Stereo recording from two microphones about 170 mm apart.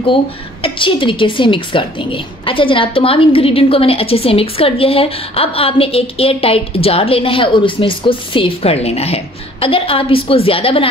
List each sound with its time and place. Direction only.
0.0 s a woman's voice: 30° left (ahead or behind)